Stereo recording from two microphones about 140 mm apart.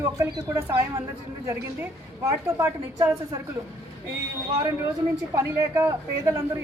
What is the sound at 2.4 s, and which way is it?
Speech, 20° right (ahead or behind).